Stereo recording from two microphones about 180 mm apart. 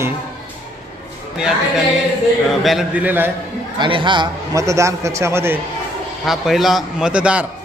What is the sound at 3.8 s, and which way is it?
A man's voice, 25° right (ahead or behind).